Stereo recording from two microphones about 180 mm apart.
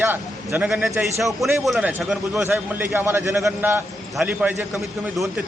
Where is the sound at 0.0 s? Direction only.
10° right (ahead or behind).